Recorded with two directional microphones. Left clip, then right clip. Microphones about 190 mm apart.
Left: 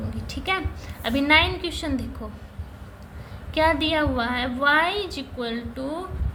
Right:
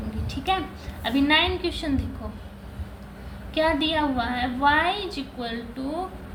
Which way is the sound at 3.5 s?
35° left (ahead or behind).